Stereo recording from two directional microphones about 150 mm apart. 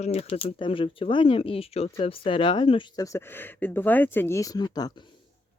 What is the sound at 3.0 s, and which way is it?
Speech, 15° left (ahead or behind).